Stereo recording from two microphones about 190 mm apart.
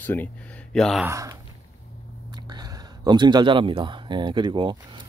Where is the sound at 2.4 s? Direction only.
20° right (ahead or behind).